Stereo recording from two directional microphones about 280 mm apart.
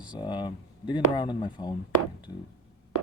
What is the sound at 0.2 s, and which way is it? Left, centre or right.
Speech, centre.